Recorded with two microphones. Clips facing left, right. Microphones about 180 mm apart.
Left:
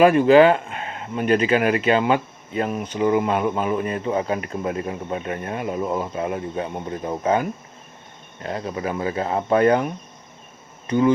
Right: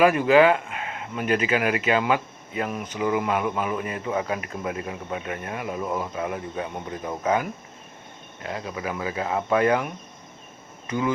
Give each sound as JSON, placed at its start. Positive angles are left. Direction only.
{"t": 0.0, "sound": "speech", "side_deg": 30}